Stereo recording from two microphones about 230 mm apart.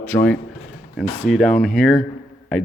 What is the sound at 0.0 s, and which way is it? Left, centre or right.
Speech, centre.